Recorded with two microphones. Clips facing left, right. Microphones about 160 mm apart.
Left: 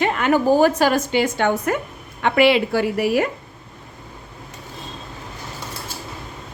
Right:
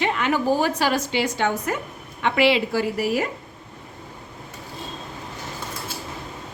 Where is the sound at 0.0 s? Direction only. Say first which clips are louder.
Left 4 dB; 50° left (ahead or behind).